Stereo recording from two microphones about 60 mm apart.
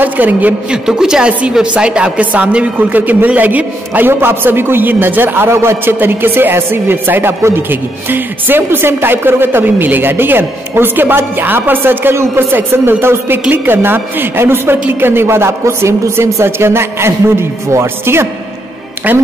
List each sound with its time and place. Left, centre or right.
0.0 s a woman's voice: right
0.7 s a woman's voice: centre; by 18.3 s right
19.1 s a woman's voice: right